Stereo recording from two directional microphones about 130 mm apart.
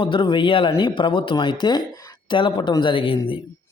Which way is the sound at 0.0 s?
40° left (ahead or behind).